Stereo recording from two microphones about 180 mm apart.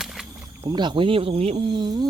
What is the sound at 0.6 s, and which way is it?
Speech, 25° right (ahead or behind).